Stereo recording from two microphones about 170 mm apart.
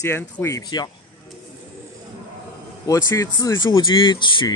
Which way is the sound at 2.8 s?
20° left (ahead or behind).